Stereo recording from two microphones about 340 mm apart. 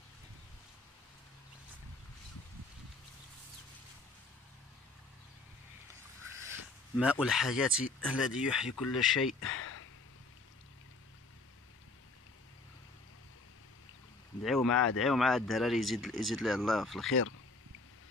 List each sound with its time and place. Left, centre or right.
7.0 s speech: centre
9.6 s a sound: left
14.4 s speech: centre